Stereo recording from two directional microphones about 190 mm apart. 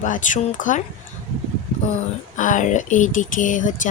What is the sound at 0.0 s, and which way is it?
Speech, 40° left (ahead or behind).